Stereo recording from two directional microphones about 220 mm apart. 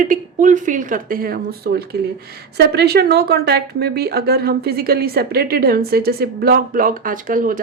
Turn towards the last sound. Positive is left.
turn(degrees=-40)  # may be behind; listen again after turning